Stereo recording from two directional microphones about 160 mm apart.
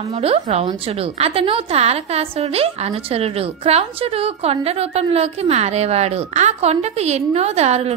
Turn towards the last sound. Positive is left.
turn(degrees=-40)  # may be behind; listen again after turning